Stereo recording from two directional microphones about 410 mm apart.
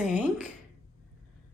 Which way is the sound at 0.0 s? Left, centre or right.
Centre.